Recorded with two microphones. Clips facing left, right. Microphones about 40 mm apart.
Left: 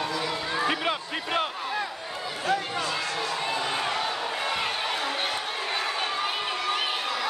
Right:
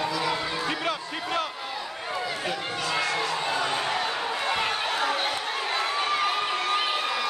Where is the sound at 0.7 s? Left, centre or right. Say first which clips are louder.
Left 2 dB; centre.